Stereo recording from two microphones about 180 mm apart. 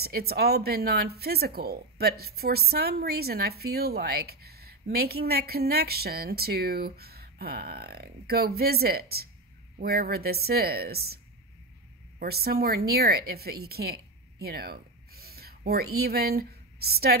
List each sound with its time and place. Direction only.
0.0 s speech: 60° right (ahead or behind)
12.2 s speech: 60° right (ahead or behind)